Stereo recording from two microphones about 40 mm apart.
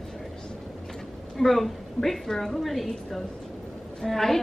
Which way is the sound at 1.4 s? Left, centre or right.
Centre.